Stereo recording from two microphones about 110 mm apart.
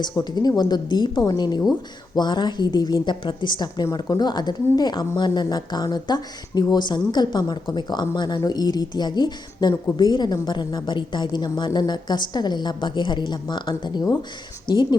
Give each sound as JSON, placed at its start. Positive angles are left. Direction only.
{"t": 0.0, "sound": "a woman's voice", "side_deg": 40}